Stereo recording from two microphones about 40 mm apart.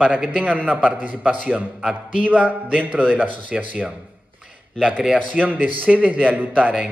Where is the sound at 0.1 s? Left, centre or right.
Right.